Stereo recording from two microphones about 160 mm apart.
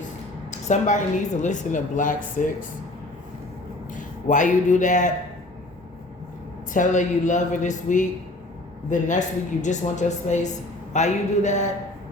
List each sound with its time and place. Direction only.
0.7 s a woman's voice: 50° left (ahead or behind)
3.9 s a man's voice: 50° left (ahead or behind)
6.7 s a woman's voice: 50° left (ahead or behind)